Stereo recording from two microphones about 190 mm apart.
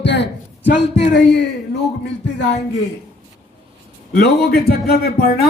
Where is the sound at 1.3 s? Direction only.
65° left (ahead or behind).